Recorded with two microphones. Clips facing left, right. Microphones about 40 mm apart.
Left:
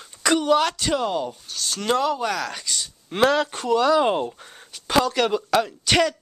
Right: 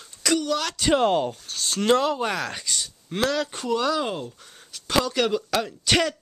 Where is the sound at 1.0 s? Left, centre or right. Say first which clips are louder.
Right 3 dB; right; by 2.5 s centre.